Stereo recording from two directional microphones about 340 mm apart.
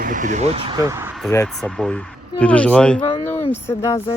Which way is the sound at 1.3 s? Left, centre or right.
Centre.